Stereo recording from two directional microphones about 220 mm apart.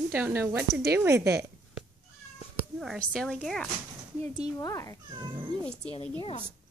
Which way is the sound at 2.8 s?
Centre (ahead or behind).